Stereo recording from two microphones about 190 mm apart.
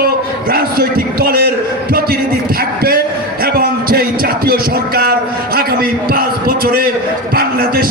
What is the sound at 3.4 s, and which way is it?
Music, 50° right (ahead or behind).